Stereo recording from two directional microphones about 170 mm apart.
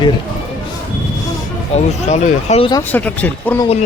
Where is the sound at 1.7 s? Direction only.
45° left (ahead or behind).